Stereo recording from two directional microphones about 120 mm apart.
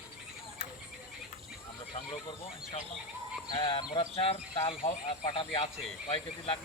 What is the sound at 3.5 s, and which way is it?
Speech, 45° left (ahead or behind).